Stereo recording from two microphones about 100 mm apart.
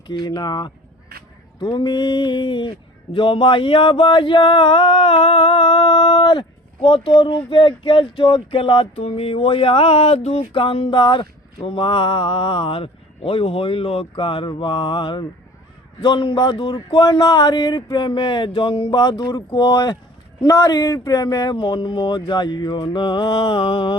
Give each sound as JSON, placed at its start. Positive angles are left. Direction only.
{"t": 0.1, "sound": "speech", "side_deg": 45}
{"t": 11.0, "sound": "speech", "side_deg": 50}